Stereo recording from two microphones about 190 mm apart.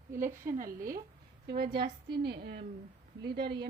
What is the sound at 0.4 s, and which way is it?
Speech, 45° right (ahead or behind).